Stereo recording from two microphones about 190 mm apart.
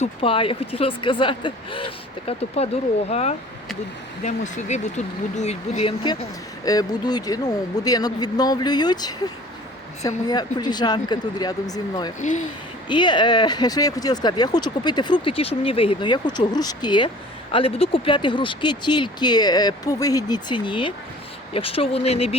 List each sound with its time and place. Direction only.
0.0 s speech: 30° left (ahead or behind)